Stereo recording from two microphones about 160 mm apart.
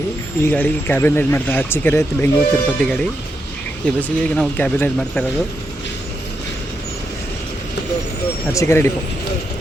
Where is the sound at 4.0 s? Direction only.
5° left (ahead or behind).